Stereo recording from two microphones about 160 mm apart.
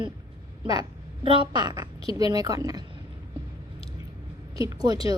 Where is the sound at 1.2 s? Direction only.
30° right (ahead or behind).